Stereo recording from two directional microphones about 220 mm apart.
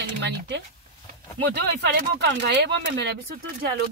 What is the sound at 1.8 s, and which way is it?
Speech, 50° right (ahead or behind).